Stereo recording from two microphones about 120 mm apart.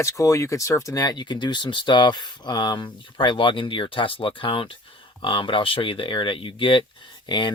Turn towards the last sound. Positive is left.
turn(degrees=40)  # may be behind; listen again after turning